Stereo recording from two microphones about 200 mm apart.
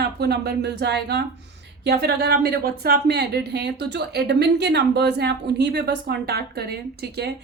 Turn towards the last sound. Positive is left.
turn(degrees=-55)  # may be behind; listen again after turning